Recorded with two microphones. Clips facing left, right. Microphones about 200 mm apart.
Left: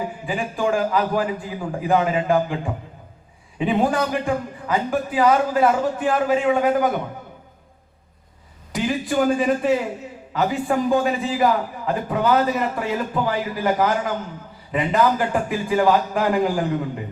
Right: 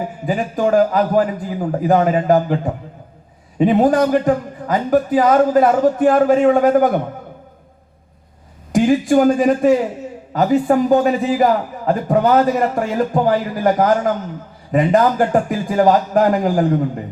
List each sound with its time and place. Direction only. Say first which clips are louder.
0.3 s a man's voice: right 6 dB; 40° right (ahead or behind)
8.7 s a man's voice: right 9 dB; 45° right (ahead or behind)